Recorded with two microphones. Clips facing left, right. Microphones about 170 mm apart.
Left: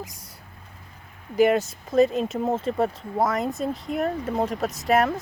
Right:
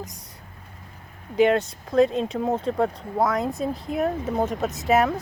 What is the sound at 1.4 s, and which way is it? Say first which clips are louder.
Speech: even; 5° left (ahead or behind).